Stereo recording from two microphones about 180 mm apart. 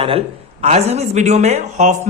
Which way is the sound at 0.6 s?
35° right (ahead or behind).